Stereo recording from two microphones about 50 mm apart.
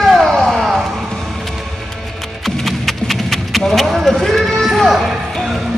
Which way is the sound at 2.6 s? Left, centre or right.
Centre.